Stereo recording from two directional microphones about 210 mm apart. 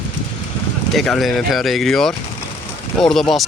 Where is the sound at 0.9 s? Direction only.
Centre (ahead or behind).